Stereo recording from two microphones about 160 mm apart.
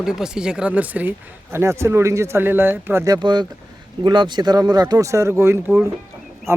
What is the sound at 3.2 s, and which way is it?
Speech, 25° right (ahead or behind).